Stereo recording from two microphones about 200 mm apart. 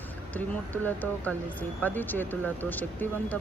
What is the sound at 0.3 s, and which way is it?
Speech, 10° left (ahead or behind).